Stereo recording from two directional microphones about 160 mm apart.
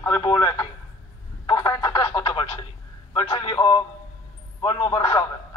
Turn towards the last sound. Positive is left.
turn(degrees=30)  # may be behind; listen again after turning